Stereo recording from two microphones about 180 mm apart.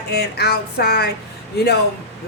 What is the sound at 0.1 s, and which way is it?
Speech, 60° left (ahead or behind).